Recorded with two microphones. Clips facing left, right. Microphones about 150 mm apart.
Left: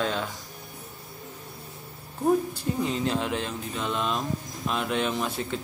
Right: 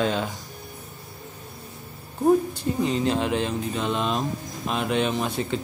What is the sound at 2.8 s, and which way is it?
Speech, centre (ahead or behind).